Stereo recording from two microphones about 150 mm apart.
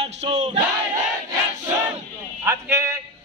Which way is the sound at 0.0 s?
45° right (ahead or behind).